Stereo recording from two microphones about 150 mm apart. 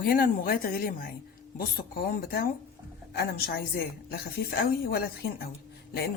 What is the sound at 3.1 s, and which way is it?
A woman's voice, 90° left.